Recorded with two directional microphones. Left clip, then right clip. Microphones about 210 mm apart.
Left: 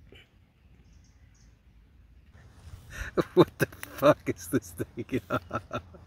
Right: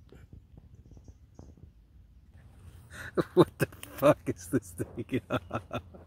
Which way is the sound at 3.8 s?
5° right (ahead or behind).